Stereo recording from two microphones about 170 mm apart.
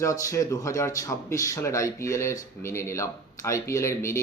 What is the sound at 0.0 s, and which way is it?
Speech, 20° left (ahead or behind).